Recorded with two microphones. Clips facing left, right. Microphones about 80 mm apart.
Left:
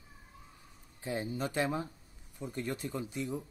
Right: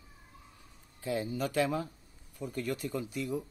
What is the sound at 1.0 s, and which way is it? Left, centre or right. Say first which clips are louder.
Speech: right 2 dB; left.